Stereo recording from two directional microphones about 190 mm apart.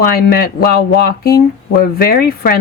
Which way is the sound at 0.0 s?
50° left (ahead or behind).